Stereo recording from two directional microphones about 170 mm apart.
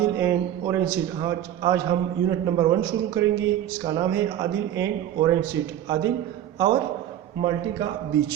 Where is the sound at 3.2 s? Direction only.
20° right (ahead or behind).